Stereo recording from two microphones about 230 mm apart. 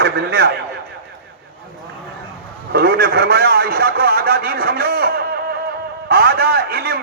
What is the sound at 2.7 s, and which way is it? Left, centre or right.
A man's voice, right.